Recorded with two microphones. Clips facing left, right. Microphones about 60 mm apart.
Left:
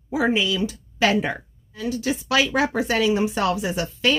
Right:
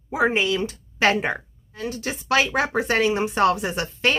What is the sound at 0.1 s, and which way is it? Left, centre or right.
A woman's voice, right.